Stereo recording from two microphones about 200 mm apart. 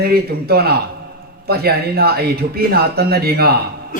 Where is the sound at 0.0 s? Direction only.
50° right (ahead or behind).